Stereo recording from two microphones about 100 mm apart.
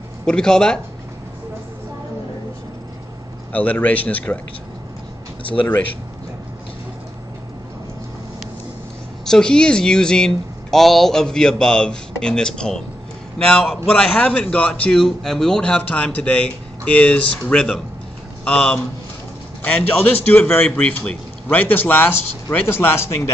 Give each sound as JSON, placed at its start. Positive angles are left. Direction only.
{"t": 0.2, "sound": "speech", "side_deg": 5}
{"t": 3.5, "sound": "speech", "side_deg": 15}
{"t": 9.2, "sound": "a man's voice", "side_deg": 5}
{"t": 20.0, "sound": "a man's voice", "side_deg": 15}